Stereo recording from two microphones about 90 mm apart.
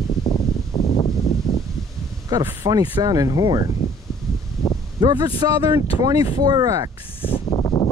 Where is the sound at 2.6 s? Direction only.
45° right (ahead or behind).